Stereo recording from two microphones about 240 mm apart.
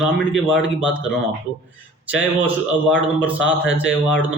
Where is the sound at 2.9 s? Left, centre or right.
Centre.